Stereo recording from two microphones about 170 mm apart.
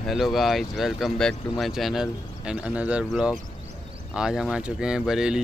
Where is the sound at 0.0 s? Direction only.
Centre (ahead or behind).